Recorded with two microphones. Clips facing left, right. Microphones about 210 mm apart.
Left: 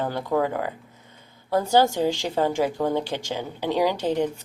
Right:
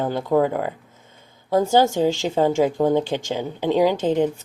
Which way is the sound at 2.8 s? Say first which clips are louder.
Right 5 dB; 15° right (ahead or behind).